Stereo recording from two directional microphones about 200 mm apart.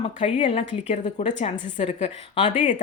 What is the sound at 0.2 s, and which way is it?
A woman's voice, 25° left (ahead or behind).